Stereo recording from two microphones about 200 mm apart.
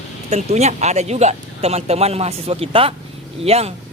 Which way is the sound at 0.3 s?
35° right (ahead or behind).